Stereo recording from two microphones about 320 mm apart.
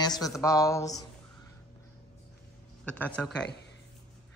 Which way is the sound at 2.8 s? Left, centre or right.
Centre.